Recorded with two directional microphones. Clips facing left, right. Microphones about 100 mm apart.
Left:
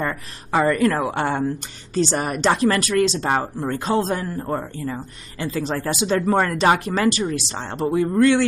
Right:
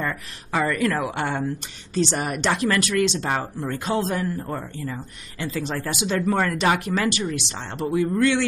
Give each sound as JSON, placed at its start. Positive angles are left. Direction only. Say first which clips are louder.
{"t": 0.0, "sound": "speech", "louder": "left 2 dB", "side_deg": 45}